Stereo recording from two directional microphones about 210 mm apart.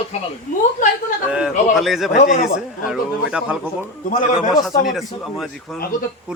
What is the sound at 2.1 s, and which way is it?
Speech, 40° left (ahead or behind).